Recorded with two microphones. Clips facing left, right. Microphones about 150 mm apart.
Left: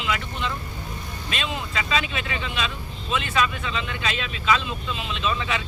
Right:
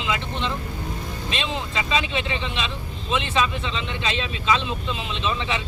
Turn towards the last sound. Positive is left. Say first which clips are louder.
# even
turn(degrees=-25)  # may be behind; listen again after turning